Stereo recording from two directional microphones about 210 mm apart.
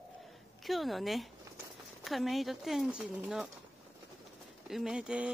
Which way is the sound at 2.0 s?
Centre (ahead or behind).